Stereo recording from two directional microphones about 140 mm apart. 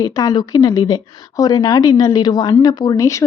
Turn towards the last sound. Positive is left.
turn(degrees=20)  # may be behind; listen again after turning